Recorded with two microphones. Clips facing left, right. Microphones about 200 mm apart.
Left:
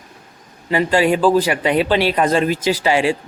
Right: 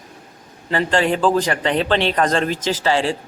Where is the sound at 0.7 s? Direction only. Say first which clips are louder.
Left 3 dB; 10° left (ahead or behind).